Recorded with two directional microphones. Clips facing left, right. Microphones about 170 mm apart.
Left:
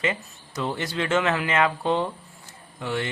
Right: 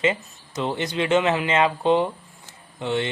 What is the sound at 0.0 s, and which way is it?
A man's voice, 20° right (ahead or behind).